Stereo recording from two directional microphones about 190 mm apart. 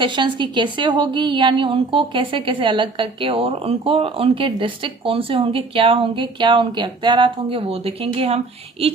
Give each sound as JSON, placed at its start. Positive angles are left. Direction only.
{"t": 0.0, "sound": "a woman's voice", "side_deg": -25}